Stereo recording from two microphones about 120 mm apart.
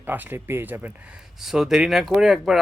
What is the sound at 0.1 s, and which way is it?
Speech, 20° right (ahead or behind).